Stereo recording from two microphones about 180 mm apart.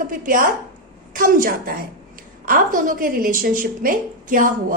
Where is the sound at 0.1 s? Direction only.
50° right (ahead or behind).